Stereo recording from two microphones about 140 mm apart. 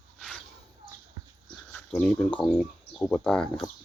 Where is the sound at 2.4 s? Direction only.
5° left (ahead or behind).